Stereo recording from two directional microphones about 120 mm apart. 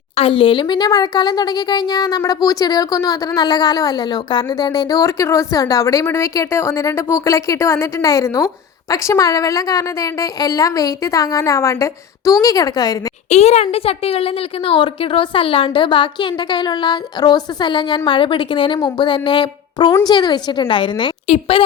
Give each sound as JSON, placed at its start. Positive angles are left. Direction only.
{"t": 0.2, "sound": "a woman's voice", "side_deg": 50}
{"t": 13.3, "sound": "a woman's voice", "side_deg": 65}
{"t": 21.2, "sound": "a woman's voice", "side_deg": 55}